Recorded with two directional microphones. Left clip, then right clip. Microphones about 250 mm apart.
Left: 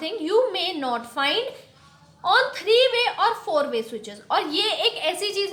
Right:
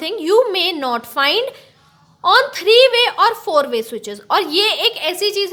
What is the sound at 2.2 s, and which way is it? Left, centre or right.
A woman's voice, right.